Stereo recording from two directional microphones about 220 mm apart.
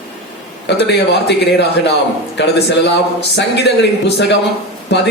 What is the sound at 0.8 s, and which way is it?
A man's voice, 50° left (ahead or behind).